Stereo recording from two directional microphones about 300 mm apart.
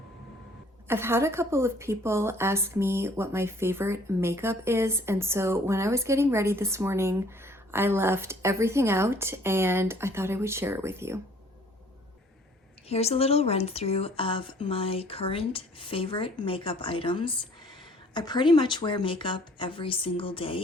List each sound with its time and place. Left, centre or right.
0.9 s a woman's voice: centre
12.9 s a woman's voice: left